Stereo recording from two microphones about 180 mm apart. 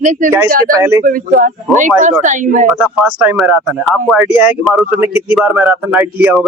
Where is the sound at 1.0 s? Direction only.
50° right (ahead or behind).